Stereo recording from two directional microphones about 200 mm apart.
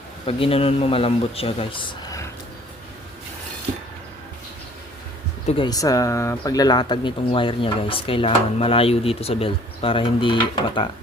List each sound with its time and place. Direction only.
0.3 s speech: 30° left (ahead or behind)
5.5 s speech: 25° left (ahead or behind)